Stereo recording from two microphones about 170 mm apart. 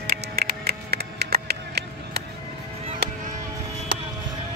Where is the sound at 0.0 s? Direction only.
60° right (ahead or behind).